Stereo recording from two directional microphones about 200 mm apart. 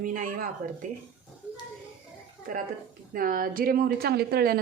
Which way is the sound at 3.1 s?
45° right (ahead or behind).